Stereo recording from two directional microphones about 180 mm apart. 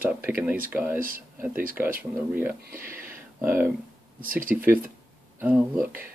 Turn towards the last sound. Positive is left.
turn(degrees=-10)  # may be behind; listen again after turning